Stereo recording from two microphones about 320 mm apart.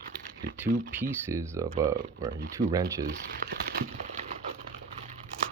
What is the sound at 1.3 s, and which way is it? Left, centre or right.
Speech, centre.